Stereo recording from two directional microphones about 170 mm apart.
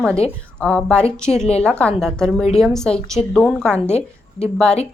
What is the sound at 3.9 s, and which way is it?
Speech, 35° left (ahead or behind).